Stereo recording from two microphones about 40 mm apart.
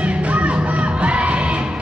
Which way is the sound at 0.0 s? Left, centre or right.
Right.